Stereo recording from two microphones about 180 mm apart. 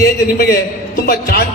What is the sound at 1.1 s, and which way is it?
Speech, 60° left (ahead or behind).